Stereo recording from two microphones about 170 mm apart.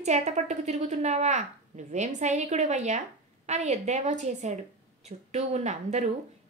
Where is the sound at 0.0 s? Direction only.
45° right (ahead or behind).